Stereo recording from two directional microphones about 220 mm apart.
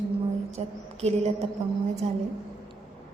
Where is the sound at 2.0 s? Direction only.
30° right (ahead or behind).